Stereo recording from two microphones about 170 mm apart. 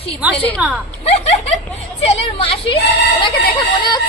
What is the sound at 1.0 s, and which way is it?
A woman's voice, 40° left (ahead or behind).